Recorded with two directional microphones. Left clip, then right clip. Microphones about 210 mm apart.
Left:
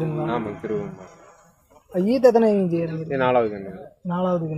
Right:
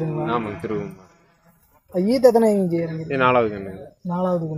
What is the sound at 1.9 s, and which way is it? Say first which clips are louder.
Speech: right 1 dB; 5° right (ahead or behind).